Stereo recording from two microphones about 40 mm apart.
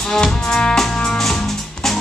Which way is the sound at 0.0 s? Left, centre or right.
Centre.